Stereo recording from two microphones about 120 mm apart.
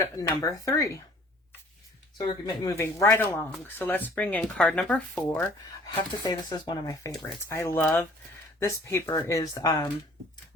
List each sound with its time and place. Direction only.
0.0 s speech: 30° left (ahead or behind)
2.1 s speech: 30° left (ahead or behind)
6.0 s speech: 35° left (ahead or behind)